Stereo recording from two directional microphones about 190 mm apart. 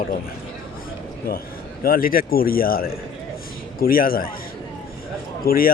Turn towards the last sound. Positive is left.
turn(degrees=50)  # may be behind; listen again after turning